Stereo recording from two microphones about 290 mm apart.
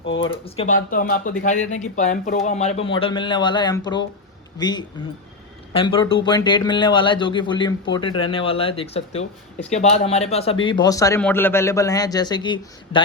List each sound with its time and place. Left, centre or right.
0.2 s a man's voice: centre